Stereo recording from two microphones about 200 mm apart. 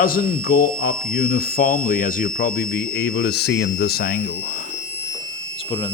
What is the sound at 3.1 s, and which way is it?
Speech, 65° left (ahead or behind).